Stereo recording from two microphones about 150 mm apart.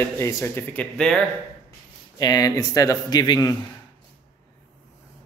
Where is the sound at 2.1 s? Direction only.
25° left (ahead or behind).